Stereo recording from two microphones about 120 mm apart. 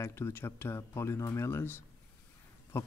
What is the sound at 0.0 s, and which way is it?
Speech, 20° left (ahead or behind).